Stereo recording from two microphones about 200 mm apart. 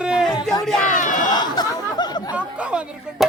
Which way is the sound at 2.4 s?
5° right (ahead or behind).